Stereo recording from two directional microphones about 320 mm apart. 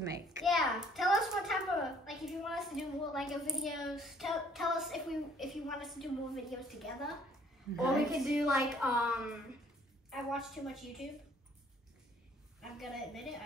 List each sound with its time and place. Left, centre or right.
0.3 s a child's voice: centre
12.7 s a child's voice: centre